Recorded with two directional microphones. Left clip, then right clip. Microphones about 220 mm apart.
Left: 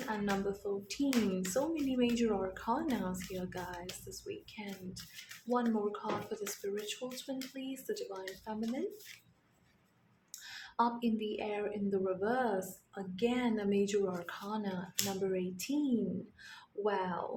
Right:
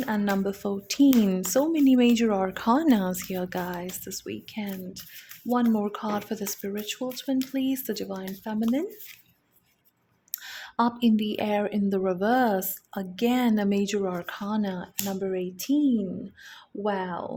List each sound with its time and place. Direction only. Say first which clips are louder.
0.1 s speech: right 7 dB; 40° right (ahead or behind)
10.3 s speech: right 7 dB; 40° right (ahead or behind)